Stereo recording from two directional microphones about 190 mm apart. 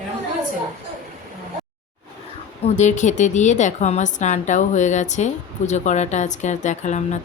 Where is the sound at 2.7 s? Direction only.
40° left (ahead or behind).